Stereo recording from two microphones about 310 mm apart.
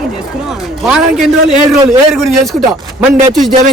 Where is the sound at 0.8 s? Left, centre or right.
Centre.